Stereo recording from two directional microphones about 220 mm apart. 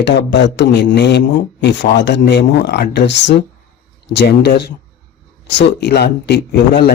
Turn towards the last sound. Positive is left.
turn(degrees=50)  # may be behind; listen again after turning